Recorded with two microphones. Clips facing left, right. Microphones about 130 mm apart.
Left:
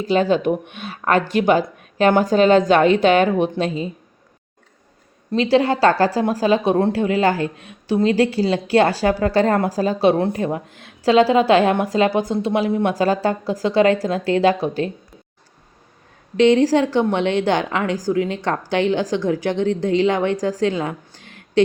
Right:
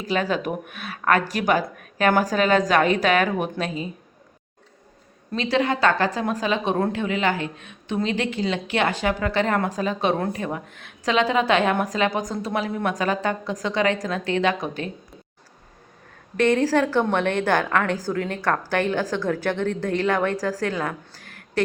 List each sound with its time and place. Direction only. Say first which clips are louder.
0.0 s a woman's voice: left 7 dB; 30° left (ahead or behind)
5.3 s speech: left 6 dB; 30° left (ahead or behind)
16.4 s a woman's voice: left 5 dB; 15° left (ahead or behind)